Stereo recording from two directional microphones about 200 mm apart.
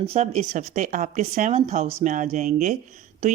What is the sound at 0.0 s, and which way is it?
A woman's voice, 30° right (ahead or behind).